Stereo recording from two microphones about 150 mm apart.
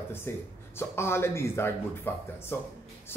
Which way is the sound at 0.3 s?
15° left (ahead or behind).